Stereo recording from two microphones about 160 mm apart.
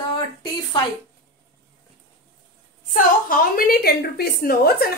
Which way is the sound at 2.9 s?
60° left (ahead or behind).